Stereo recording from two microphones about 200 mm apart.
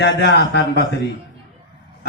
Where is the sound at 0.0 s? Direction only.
55° left (ahead or behind).